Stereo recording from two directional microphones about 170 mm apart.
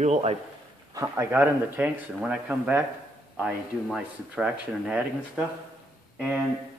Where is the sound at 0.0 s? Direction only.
40° right (ahead or behind).